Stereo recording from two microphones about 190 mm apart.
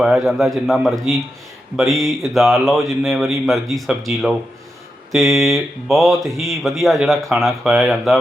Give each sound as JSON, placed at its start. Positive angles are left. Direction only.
{"t": 0.0, "sound": "speech", "side_deg": 0}